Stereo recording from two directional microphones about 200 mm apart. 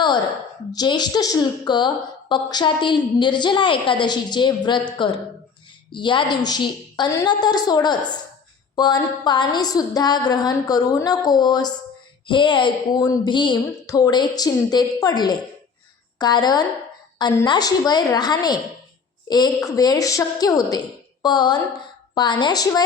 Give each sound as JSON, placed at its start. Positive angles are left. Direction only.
{"t": 0.7, "sound": "a woman's voice", "side_deg": 20}
{"t": 19.6, "sound": "a woman's voice", "side_deg": 20}